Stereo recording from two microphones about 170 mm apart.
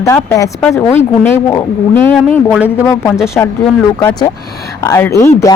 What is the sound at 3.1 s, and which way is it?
Speech, 5° right (ahead or behind).